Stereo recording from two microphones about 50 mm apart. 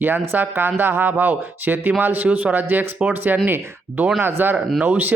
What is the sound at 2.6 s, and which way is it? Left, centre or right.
Speech, right.